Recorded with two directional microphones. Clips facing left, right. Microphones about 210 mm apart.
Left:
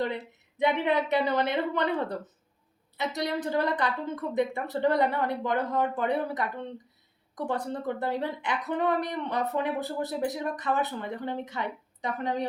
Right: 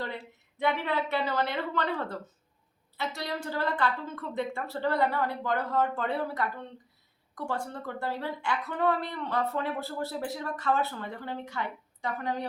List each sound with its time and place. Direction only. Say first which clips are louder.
0.0 s speech: left 6 dB; 20° left (ahead or behind)